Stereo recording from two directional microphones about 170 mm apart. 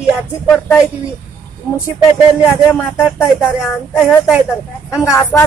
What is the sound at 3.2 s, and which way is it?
Speech, 10° left (ahead or behind).